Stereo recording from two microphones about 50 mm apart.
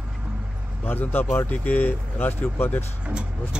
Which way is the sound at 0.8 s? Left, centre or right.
Left.